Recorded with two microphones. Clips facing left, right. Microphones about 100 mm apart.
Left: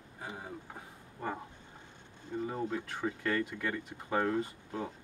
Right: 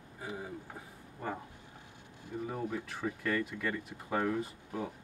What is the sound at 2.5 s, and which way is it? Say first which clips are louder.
Speech: left 1 dB; 20° left (ahead or behind).